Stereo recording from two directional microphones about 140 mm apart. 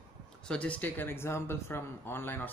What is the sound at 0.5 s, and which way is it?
Speech, 10° left (ahead or behind).